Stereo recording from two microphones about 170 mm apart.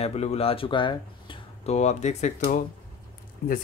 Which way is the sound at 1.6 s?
40° left (ahead or behind).